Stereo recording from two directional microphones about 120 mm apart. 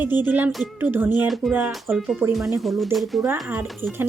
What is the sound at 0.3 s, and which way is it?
Speech, 15° right (ahead or behind).